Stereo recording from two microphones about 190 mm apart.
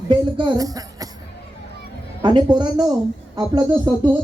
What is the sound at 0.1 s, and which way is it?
Speech, 25° right (ahead or behind).